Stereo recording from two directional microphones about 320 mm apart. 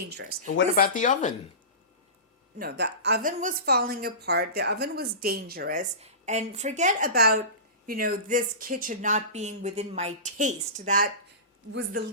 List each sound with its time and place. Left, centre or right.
0.1 s speech: right
0.5 s speech: left
2.6 s a woman's voice: right